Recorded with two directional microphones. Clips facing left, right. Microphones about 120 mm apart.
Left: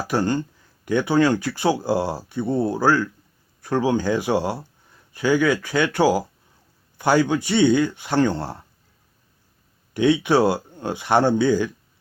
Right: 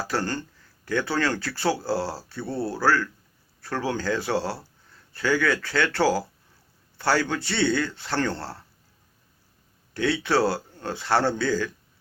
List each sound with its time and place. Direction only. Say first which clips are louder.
0.0 s speech: left 6 dB; 15° left (ahead or behind)
9.9 s speech: left 6 dB; 15° left (ahead or behind)